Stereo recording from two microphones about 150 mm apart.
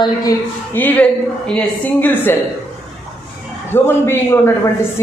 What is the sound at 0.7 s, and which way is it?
Speech, 10° left (ahead or behind).